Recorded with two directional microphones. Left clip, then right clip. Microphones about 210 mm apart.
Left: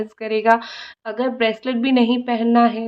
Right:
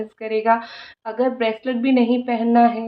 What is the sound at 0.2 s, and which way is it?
A woman's voice, 40° left (ahead or behind).